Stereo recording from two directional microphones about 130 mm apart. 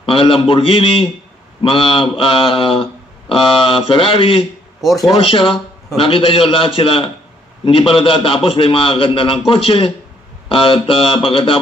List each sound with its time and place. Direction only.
0.0 s mantra: 45° left (ahead or behind)